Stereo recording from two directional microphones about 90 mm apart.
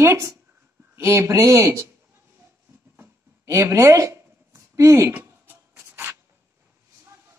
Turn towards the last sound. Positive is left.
turn(degrees=-25)  # may be behind; listen again after turning